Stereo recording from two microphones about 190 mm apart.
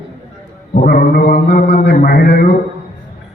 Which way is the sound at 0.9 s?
55° left (ahead or behind).